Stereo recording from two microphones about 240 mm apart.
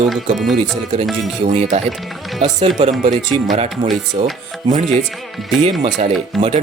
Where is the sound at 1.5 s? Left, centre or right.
Right.